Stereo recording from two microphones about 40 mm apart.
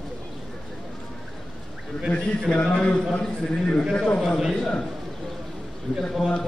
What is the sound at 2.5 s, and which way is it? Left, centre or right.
Speech, left.